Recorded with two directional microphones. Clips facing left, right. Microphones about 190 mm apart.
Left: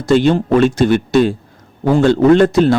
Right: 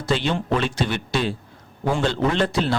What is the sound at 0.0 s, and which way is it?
Speech, 45° left (ahead or behind).